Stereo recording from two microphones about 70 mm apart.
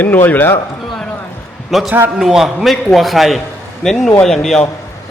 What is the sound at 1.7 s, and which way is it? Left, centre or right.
A man's voice, centre.